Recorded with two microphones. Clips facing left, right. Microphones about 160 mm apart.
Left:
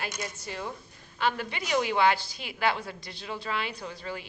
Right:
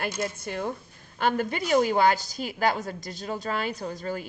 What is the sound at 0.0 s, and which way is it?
A woman's voice, 55° right (ahead or behind).